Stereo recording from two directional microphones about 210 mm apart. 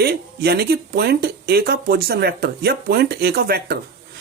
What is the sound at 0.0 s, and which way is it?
Speech, 50° right (ahead or behind).